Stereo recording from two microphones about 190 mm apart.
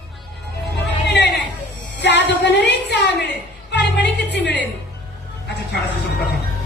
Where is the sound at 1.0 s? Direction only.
65° left (ahead or behind).